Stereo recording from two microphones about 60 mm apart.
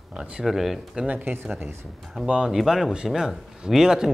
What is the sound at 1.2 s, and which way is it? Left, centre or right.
Speech, right.